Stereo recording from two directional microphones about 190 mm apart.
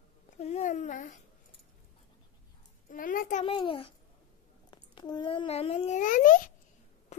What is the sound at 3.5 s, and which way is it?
A child's voice, 30° left (ahead or behind).